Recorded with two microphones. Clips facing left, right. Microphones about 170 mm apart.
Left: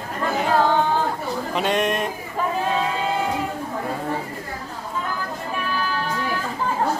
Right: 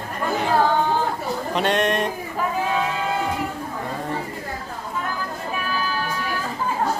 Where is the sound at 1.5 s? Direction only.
5° left (ahead or behind).